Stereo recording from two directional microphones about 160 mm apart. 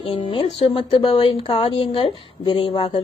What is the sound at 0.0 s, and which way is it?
A woman's voice, 35° left (ahead or behind).